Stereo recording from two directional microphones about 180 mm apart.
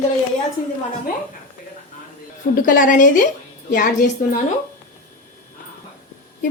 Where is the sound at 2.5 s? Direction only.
50° left (ahead or behind).